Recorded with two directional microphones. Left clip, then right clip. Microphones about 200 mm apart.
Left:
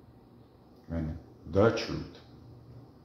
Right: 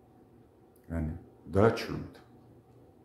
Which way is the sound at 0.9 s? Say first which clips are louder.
Left 1 dB; 15° right (ahead or behind).